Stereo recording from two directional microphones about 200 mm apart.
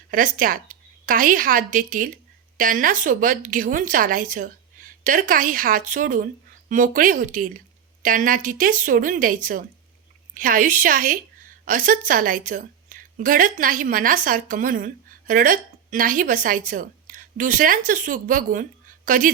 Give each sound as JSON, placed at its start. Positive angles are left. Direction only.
{"t": 0.1, "sound": "a woman's voice", "side_deg": -40}